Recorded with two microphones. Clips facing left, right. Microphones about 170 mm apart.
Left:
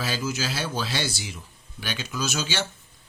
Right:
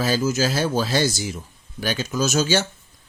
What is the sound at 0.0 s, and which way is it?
Speech, 45° right (ahead or behind).